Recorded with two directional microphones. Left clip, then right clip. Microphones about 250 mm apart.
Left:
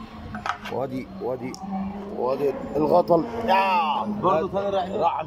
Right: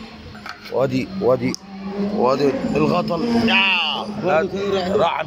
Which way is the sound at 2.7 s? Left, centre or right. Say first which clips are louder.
Left 1 dB; centre.